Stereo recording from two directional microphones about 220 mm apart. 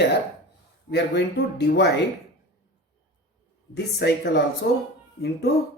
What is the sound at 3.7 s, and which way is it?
Speech, 50° left (ahead or behind).